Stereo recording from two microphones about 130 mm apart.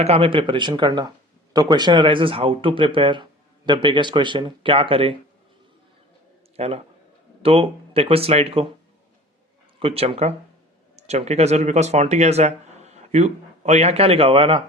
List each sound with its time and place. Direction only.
0.0 s speech: 50° right (ahead or behind)
6.6 s speech: 55° right (ahead or behind)
9.8 s speech: 45° right (ahead or behind)